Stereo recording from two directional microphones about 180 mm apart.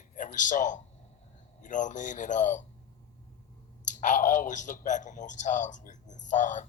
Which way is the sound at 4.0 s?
45° left (ahead or behind).